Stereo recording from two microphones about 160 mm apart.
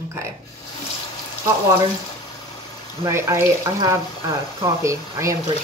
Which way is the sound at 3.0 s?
15° right (ahead or behind).